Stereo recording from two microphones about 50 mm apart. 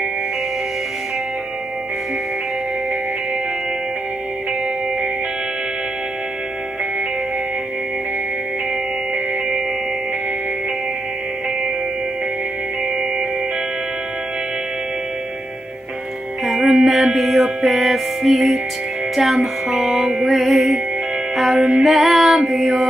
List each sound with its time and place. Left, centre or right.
16.4 s music: centre
16.9 s mantra: centre
17.6 s music: centre
21.5 s music: centre
21.8 s music: centre